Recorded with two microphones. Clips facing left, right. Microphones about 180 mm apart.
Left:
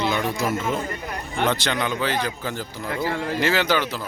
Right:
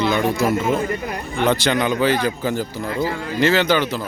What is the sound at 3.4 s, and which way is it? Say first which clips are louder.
Speech: right 6 dB; 10° left (ahead or behind).